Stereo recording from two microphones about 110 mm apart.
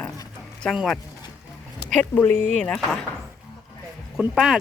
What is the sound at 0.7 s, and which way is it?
Speech, centre (ahead or behind).